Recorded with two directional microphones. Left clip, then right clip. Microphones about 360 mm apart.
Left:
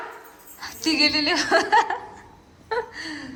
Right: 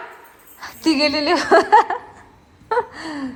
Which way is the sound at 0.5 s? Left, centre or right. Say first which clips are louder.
Right 3 dB; centre.